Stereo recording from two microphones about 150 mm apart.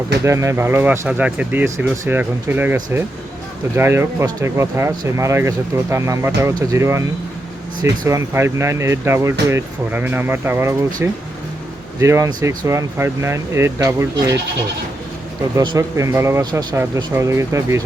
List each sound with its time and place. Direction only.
0.3 s speech: 20° right (ahead or behind)
15.5 s speech: 25° right (ahead or behind)